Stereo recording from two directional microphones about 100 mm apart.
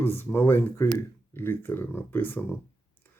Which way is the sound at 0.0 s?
25° left (ahead or behind).